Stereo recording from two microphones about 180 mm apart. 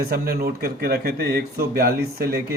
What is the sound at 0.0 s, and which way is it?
A man's voice, 60° right (ahead or behind).